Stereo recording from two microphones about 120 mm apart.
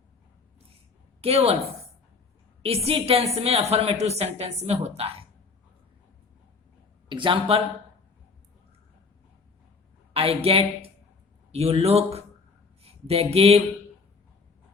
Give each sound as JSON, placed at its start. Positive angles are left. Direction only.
{"t": 1.2, "sound": "a woman's voice", "side_deg": -55}
{"t": 2.6, "sound": "a woman's voice", "side_deg": -55}
{"t": 7.1, "sound": "speech", "side_deg": -45}
{"t": 10.2, "sound": "a woman's voice", "side_deg": -55}
{"t": 12.8, "sound": "a sound", "side_deg": -55}